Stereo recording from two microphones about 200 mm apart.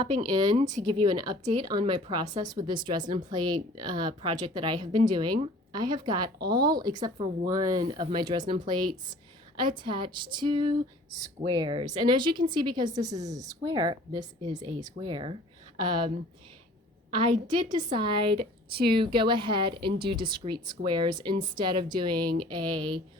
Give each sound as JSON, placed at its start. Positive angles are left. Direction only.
{"t": 0.2, "sound": "speech", "side_deg": -20}
{"t": 0.6, "sound": "speech", "side_deg": -40}
{"t": 0.9, "sound": "speech", "side_deg": -20}
{"t": 17.5, "sound": "speech", "side_deg": -20}